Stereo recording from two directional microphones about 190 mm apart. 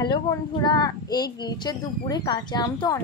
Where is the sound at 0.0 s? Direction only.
25° left (ahead or behind).